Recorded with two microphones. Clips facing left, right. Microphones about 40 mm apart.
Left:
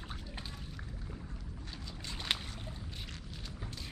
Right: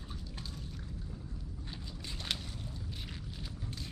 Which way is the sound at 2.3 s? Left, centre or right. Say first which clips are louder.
Left 3 dB; left.